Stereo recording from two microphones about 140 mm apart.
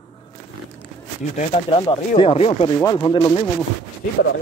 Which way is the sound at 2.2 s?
40° left (ahead or behind).